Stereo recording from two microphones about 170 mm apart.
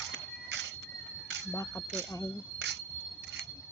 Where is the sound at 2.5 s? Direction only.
90° right.